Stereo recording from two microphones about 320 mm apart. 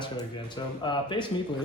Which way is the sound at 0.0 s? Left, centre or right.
Centre.